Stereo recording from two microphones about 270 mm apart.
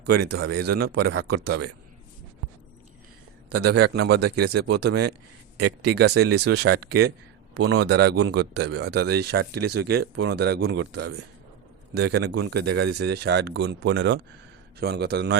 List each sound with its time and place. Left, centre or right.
0.0 s speech: right
3.7 s speech: right
8.1 s a man's voice: right
8.4 s speech: right